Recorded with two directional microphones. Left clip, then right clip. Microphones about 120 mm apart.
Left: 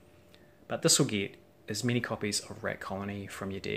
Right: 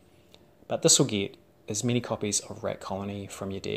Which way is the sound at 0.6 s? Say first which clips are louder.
Right 4 dB; 20° right (ahead or behind).